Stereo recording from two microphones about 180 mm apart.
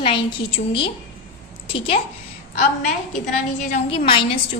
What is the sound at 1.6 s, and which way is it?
Speech, 30° left (ahead or behind).